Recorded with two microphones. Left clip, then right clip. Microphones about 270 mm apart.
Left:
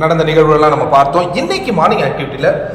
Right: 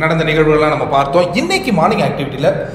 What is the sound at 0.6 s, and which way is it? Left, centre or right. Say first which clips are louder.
A man's voice: left 4 dB; centre.